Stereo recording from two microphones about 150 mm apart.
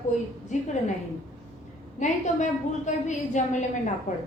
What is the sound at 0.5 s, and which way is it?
Speech, 50° left (ahead or behind).